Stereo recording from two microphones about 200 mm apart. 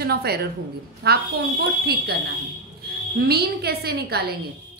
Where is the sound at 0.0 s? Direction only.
50° right (ahead or behind).